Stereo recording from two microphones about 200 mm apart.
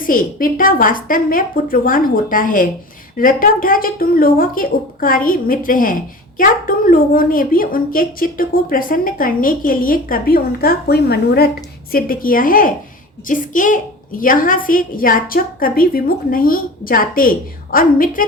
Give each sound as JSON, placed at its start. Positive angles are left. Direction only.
{"t": 0.0, "sound": "speech", "side_deg": 45}